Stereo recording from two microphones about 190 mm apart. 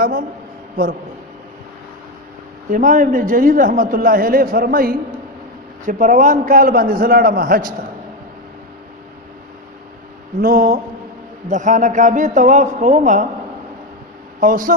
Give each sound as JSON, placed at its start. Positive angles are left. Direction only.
{"t": 0.0, "sound": "a man's voice", "side_deg": -50}
{"t": 2.6, "sound": "a man's voice", "side_deg": -45}
{"t": 10.4, "sound": "a man's voice", "side_deg": -50}
{"t": 14.4, "sound": "a man's voice", "side_deg": -45}